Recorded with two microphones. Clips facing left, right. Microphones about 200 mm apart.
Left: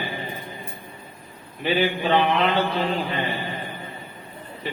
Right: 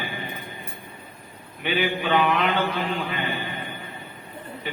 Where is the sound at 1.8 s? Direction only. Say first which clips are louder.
Left 1 dB; 35° left (ahead or behind).